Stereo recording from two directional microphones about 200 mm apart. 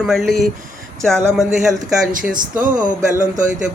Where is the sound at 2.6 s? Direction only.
40° right (ahead or behind).